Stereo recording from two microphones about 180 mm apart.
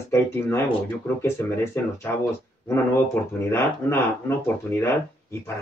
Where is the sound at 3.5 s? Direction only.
15° left (ahead or behind).